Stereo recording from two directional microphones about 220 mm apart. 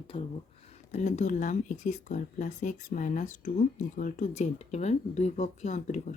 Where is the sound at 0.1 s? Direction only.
25° left (ahead or behind).